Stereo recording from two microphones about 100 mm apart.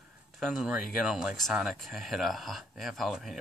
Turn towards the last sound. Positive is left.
turn(degrees=0)  # may be behind; listen again after turning